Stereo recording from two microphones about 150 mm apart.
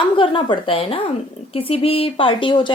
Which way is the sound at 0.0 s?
35° left (ahead or behind).